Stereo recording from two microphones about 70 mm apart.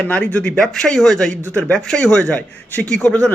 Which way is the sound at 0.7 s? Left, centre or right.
Centre.